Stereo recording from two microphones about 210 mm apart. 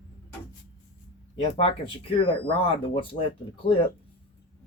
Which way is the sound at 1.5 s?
25° left (ahead or behind).